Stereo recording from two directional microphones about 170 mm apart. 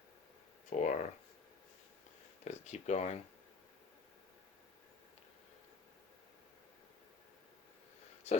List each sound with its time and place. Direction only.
0.7 s speech: 45° left (ahead or behind)
2.4 s speech: 40° left (ahead or behind)
8.3 s speech: 40° left (ahead or behind)